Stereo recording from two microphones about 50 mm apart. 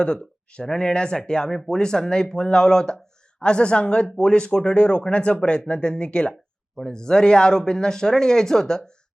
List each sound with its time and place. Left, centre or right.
0.5 s speech: centre